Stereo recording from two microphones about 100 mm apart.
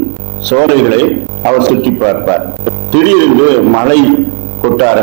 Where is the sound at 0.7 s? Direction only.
15° right (ahead or behind).